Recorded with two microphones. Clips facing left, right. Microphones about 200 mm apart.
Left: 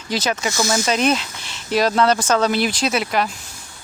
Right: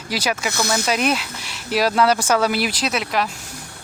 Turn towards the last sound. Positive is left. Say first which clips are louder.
# left 2 dB
turn(degrees=0)  # may be behind; listen again after turning